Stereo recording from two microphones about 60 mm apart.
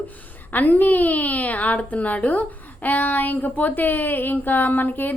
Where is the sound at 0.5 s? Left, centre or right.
Left.